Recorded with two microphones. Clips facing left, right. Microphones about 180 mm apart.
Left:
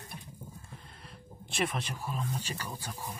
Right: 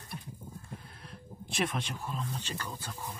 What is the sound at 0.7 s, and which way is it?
Speech, centre (ahead or behind).